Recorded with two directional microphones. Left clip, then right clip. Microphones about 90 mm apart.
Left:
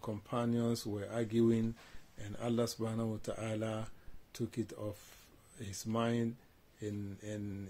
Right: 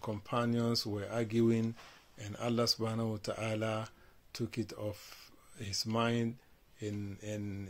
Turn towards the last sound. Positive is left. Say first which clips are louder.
# right 2 dB
turn(degrees=35)  # may be behind; listen again after turning